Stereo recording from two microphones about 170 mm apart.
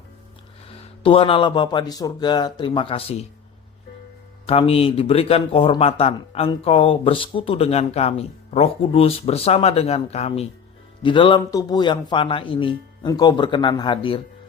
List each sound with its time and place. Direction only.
0.7 s speech: 30° left (ahead or behind)
4.4 s speech: 35° left (ahead or behind)
11.0 s speech: 30° left (ahead or behind)